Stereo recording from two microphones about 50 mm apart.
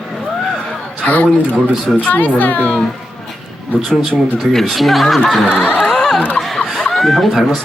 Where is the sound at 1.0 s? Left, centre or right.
Left.